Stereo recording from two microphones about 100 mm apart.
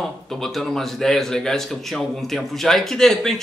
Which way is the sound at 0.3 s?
5° left (ahead or behind).